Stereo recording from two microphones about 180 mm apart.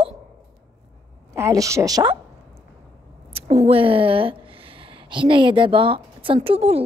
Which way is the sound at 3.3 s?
35° right (ahead or behind).